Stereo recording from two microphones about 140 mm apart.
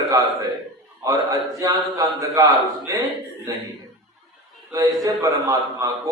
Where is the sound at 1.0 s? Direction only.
25° right (ahead or behind).